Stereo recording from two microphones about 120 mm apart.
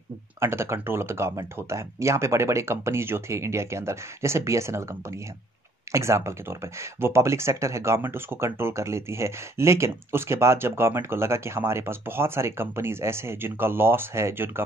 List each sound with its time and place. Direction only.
0.4 s speech: 20° right (ahead or behind)
5.9 s speech: 25° right (ahead or behind)